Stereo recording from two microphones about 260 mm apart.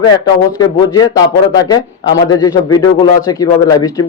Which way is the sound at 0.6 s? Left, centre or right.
Centre.